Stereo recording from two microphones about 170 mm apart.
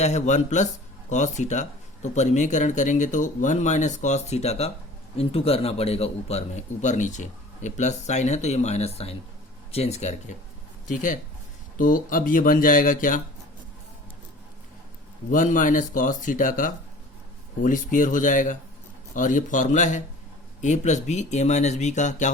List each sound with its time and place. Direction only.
0.0 s a man's voice: 45° left (ahead or behind)
15.3 s speech: 50° left (ahead or behind)